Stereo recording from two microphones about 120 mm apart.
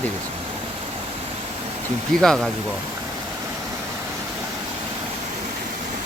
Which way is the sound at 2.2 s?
5° left (ahead or behind).